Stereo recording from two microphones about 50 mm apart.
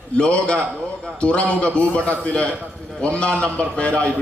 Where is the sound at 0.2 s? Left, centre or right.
Left.